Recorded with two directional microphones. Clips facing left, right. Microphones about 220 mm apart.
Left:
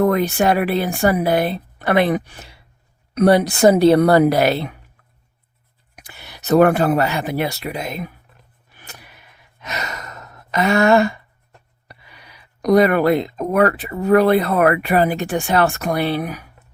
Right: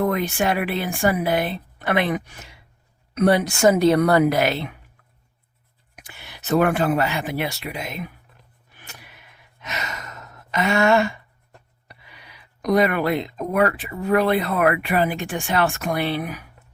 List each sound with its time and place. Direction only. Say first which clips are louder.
0.0 s speech: left 5 dB; 40° left (ahead or behind)
6.0 s speech: left 2 dB; 40° left (ahead or behind)
9.6 s sigh: left 3 dB; 40° left (ahead or behind)
11.9 s speech: left 2 dB; 40° left (ahead or behind)